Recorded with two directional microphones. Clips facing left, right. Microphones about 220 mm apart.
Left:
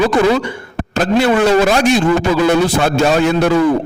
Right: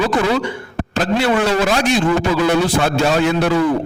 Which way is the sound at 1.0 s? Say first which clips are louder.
Left 4 dB; 45° left (ahead or behind).